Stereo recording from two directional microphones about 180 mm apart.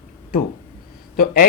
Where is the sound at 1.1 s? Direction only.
50° left (ahead or behind).